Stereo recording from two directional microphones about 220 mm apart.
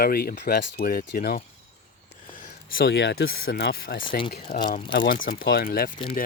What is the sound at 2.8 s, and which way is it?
Speech, 50° left (ahead or behind).